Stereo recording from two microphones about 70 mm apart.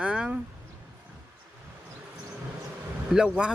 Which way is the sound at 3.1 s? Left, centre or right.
Centre.